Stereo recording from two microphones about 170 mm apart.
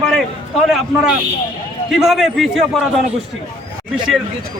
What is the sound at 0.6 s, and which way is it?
Speech, centre (ahead or behind).